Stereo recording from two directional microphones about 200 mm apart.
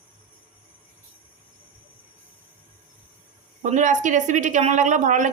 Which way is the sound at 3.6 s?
35° right (ahead or behind).